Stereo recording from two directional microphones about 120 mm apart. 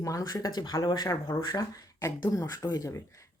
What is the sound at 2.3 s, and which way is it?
Speech, 30° left (ahead or behind).